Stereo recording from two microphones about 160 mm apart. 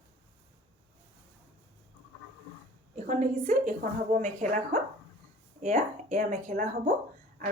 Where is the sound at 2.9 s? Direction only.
50° right (ahead or behind).